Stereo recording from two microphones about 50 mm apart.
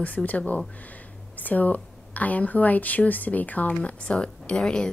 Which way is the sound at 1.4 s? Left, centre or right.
Left.